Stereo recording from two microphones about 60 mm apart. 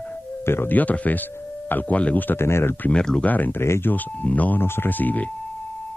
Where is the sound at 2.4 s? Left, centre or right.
Left.